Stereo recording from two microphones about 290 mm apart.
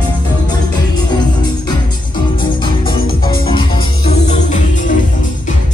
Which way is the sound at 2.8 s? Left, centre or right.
Centre.